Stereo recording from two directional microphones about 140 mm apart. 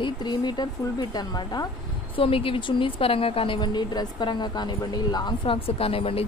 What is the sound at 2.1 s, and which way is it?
A woman's voice, 40° left (ahead or behind).